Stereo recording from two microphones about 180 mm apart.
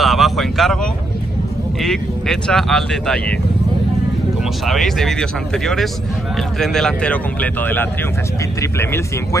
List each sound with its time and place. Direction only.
0.0 s vehicle: centre (ahead or behind)
1.8 s speech: 5° left (ahead or behind)
4.6 s speech: centre (ahead or behind)